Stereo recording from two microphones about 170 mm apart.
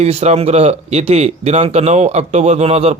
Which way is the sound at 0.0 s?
40° right (ahead or behind).